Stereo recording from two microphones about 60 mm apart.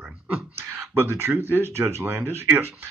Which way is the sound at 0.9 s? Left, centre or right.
Right.